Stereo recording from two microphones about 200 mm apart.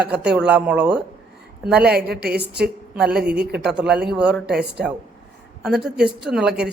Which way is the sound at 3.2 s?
55° right (ahead or behind).